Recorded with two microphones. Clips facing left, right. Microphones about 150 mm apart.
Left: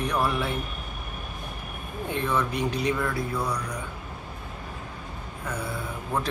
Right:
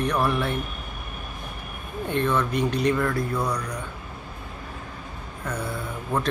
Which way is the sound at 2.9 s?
5° left (ahead or behind).